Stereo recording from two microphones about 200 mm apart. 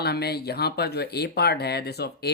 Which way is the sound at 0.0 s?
55° left (ahead or behind).